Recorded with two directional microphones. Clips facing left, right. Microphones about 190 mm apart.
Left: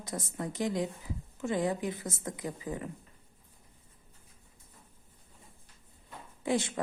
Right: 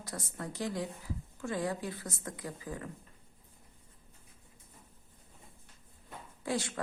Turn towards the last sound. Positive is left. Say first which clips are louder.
# left 4 dB
turn(degrees=20)  # may be behind; listen again after turning